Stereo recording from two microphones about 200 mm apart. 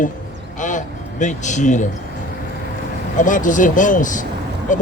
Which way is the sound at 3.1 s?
40° left (ahead or behind).